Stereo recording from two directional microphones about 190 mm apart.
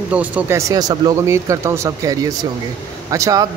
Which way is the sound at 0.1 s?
10° right (ahead or behind).